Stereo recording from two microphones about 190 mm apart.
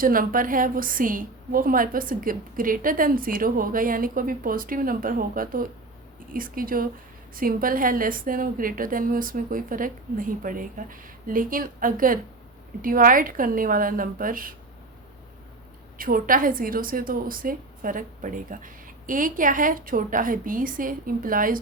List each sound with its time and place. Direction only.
0.0 s a woman's voice: 50° right (ahead or behind)
16.0 s a woman's voice: 45° right (ahead or behind)